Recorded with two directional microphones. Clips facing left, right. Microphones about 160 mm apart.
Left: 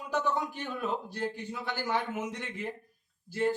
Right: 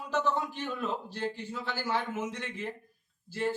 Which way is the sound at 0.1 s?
10° left (ahead or behind).